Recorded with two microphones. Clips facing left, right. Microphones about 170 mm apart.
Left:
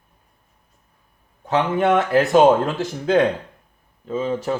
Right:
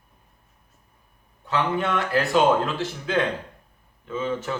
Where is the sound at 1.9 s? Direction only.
50° left (ahead or behind).